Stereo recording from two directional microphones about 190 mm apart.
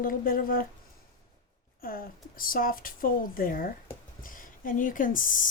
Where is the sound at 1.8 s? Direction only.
50° left (ahead or behind).